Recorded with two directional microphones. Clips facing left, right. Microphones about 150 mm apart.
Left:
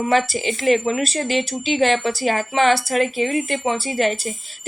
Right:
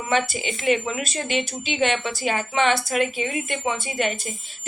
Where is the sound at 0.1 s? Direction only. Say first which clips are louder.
Left 1 dB; 35° left (ahead or behind).